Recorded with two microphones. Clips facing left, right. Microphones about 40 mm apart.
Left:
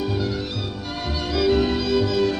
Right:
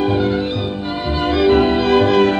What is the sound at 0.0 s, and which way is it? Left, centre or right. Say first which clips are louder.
Music: right 9 dB; right.